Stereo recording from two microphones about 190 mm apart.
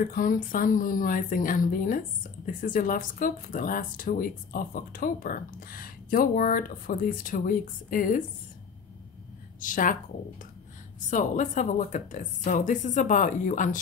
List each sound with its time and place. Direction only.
0.1 s a woman's voice: 45° left (ahead or behind)
9.6 s a woman's voice: 45° left (ahead or behind)
11.1 s a woman's voice: 40° left (ahead or behind)